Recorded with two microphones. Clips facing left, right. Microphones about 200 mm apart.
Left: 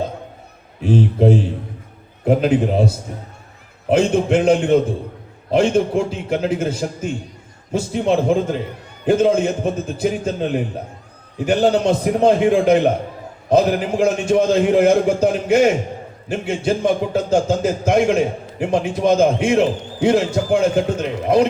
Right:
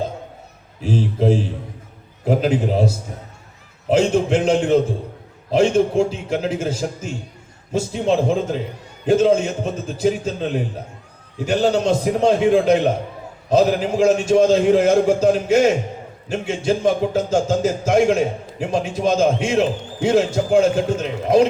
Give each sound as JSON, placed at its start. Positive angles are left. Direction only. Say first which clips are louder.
{"t": 0.8, "sound": "speech", "louder": "left 4 dB", "side_deg": 60}